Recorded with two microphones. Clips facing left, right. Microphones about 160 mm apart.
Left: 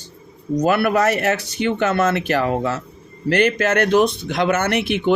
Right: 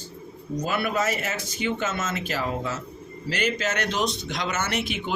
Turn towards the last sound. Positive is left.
turn(degrees=65)  # may be behind; listen again after turning